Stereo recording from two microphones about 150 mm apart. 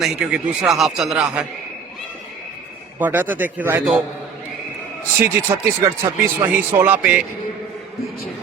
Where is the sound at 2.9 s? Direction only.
10° right (ahead or behind).